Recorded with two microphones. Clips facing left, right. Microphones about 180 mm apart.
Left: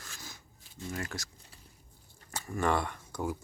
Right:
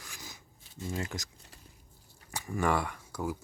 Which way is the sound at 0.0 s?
15° right (ahead or behind).